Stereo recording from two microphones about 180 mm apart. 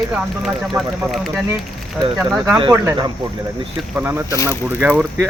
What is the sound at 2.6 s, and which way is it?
Speech, 25° right (ahead or behind).